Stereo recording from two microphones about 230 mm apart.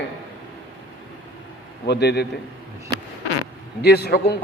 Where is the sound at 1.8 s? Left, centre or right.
Left.